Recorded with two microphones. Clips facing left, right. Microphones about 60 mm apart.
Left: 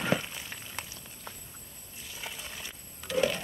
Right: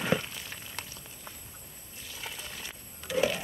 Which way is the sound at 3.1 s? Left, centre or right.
Centre.